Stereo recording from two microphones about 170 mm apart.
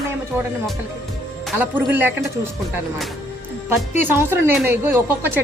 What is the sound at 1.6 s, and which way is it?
Speech, 10° right (ahead or behind).